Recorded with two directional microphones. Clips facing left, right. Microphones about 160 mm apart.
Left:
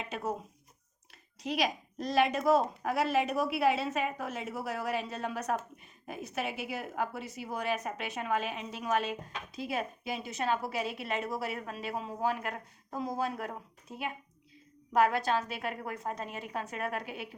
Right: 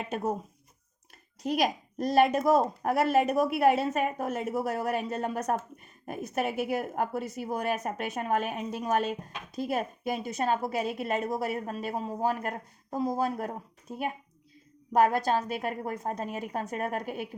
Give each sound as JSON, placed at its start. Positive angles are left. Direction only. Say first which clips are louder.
{"t": 0.1, "sound": "speech", "louder": "right 5 dB", "side_deg": -40}
{"t": 1.4, "sound": "a woman's voice", "louder": "right 4 dB", "side_deg": -45}